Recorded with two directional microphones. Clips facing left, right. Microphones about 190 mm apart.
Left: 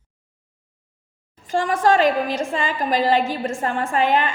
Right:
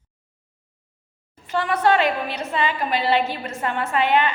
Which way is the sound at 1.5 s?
40° left (ahead or behind).